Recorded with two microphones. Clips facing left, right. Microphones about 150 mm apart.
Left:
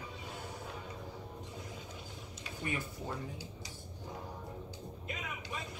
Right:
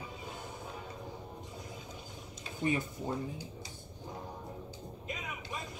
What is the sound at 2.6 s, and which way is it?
Speech, 25° right (ahead or behind).